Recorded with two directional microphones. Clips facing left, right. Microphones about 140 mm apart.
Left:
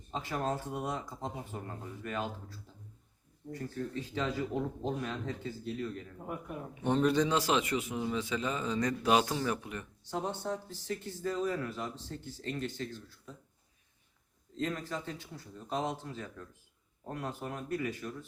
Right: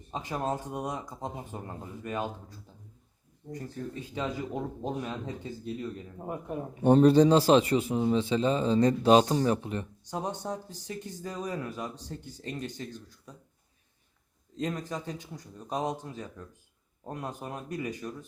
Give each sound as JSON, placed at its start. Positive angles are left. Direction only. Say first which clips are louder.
{"t": 0.1, "sound": "speech", "louder": "right 2 dB", "side_deg": -20}
{"t": 6.2, "sound": "a man's voice", "louder": "right 6 dB", "side_deg": -35}
{"t": 10.1, "sound": "speech", "louder": "right 1 dB", "side_deg": -15}
{"t": 14.5, "sound": "speech", "louder": "right 2 dB", "side_deg": -15}